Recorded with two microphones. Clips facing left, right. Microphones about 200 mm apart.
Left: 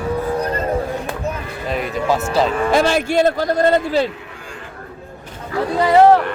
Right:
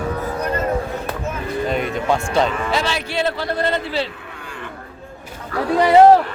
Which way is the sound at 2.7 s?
50° left (ahead or behind).